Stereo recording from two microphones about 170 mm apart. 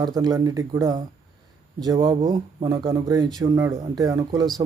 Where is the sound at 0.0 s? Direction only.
25° right (ahead or behind).